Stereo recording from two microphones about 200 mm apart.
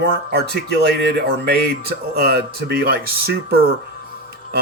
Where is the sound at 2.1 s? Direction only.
50° right (ahead or behind).